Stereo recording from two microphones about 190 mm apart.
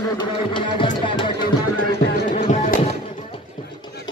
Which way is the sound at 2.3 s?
45° left (ahead or behind).